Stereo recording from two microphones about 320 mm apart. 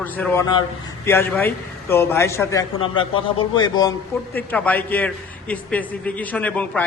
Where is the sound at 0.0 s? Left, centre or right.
Centre.